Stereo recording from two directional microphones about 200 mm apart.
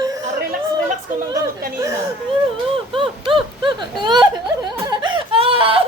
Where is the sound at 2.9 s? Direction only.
25° right (ahead or behind).